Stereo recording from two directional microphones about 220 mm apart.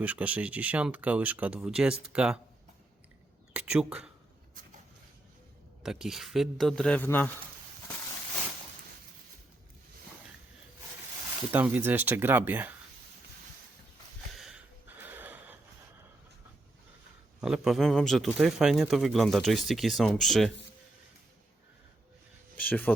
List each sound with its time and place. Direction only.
0.0 s speech: 5° right (ahead or behind)
3.5 s speech: 5° right (ahead or behind)
5.8 s speech: centre (ahead or behind)
11.5 s speech: 10° right (ahead or behind)
14.3 s a sound: centre (ahead or behind)
17.4 s speech: centre (ahead or behind)
22.5 s speech: 10° left (ahead or behind)